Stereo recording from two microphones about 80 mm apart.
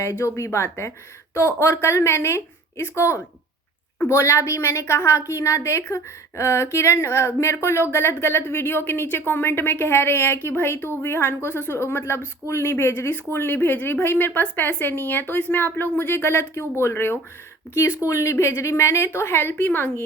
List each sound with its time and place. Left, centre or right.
0.0 s a woman's voice: left